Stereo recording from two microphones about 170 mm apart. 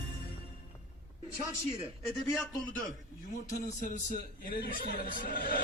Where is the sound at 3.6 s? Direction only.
50° left (ahead or behind).